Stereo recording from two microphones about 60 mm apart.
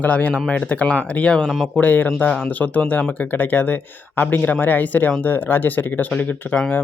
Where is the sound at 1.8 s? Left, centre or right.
Left.